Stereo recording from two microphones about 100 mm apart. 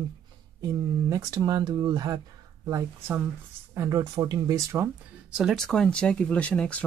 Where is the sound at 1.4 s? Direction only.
45° right (ahead or behind).